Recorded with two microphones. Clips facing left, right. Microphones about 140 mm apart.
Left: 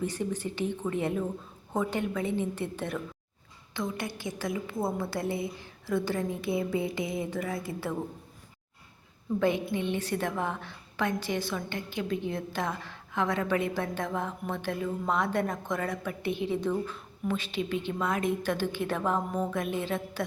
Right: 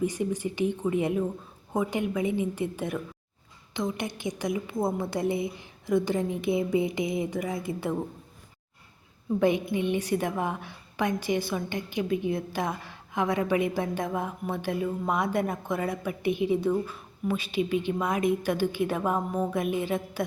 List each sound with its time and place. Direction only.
0.0 s a woman's voice: 10° right (ahead or behind)
9.4 s a woman's voice: 15° right (ahead or behind)